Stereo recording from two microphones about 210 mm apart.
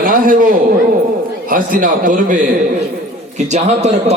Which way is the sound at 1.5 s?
40° right (ahead or behind).